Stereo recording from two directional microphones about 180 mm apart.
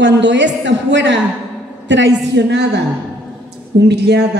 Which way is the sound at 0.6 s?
85° right.